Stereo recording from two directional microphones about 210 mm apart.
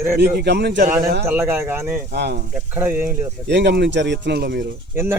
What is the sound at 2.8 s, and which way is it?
Speech, 10° right (ahead or behind).